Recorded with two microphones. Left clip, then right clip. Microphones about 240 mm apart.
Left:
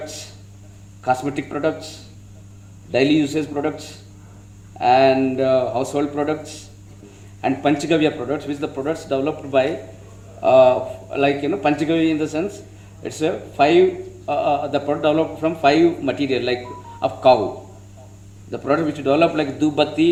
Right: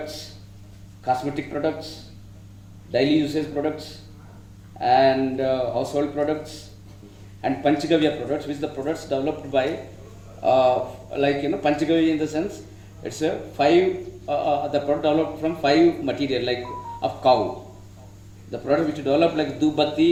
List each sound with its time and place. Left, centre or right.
1.0 s a man's voice: left
2.9 s a man's voice: left
18.5 s a man's voice: left